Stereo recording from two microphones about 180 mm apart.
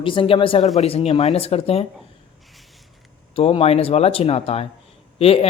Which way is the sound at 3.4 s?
30° left (ahead or behind).